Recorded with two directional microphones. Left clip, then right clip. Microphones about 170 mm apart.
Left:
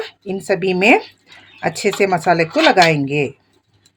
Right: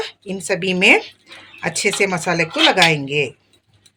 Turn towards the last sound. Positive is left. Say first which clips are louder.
# left 2 dB
turn(degrees=55)  # may be behind; listen again after turning